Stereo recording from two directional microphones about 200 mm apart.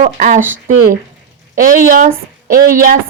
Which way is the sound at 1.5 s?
45° right (ahead or behind).